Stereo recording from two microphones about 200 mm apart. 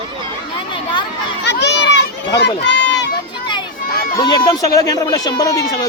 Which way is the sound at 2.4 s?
60° left (ahead or behind).